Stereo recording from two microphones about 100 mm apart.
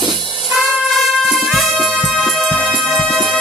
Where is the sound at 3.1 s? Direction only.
Centre (ahead or behind).